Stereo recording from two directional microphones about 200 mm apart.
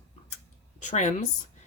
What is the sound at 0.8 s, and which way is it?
Speech, 35° left (ahead or behind).